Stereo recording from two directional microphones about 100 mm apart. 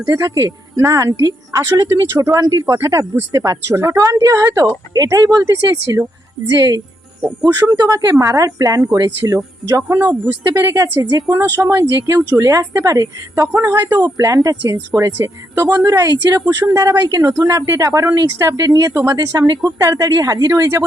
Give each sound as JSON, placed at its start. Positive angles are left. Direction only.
{"t": 0.1, "sound": "speech", "side_deg": -35}
{"t": 14.3, "sound": "speech", "side_deg": -45}
{"t": 14.7, "sound": "speech", "side_deg": -30}